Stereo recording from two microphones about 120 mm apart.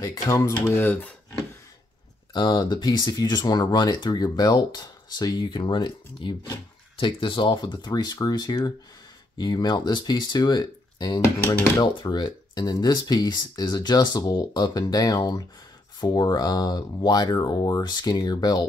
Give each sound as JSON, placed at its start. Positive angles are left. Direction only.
{"t": 0.0, "sound": "speech", "side_deg": 30}
{"t": 2.3, "sound": "speech", "side_deg": 35}
{"t": 11.1, "sound": "speech", "side_deg": 20}
{"t": 11.8, "sound": "speech", "side_deg": 35}